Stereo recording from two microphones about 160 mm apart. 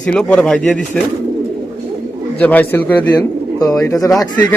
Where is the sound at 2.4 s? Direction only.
10° left (ahead or behind).